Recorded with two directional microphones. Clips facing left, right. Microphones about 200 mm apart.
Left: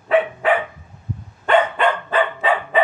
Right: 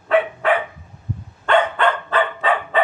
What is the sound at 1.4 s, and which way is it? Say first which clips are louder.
Dog: left 1 dB; 15° left (ahead or behind).